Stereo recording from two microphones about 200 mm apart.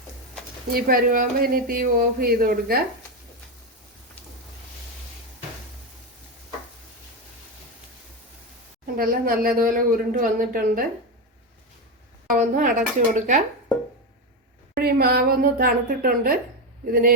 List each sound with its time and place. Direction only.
0.7 s speech: 45° right (ahead or behind)
9.0 s speech: 45° right (ahead or behind)
12.4 s speech: 40° right (ahead or behind)
14.8 s speech: 50° right (ahead or behind)